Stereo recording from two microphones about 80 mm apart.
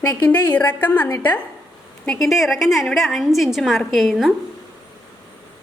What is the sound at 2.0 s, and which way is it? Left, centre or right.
A woman's voice, centre.